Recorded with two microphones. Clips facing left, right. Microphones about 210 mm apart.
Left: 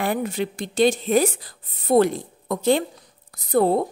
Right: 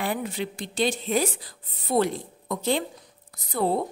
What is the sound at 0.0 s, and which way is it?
A woman's voice, 50° left (ahead or behind).